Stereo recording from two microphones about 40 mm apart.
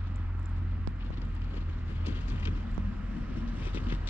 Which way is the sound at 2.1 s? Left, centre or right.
Right.